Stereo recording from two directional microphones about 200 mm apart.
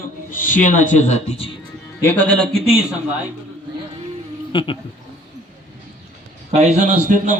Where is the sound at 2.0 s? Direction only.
10° left (ahead or behind).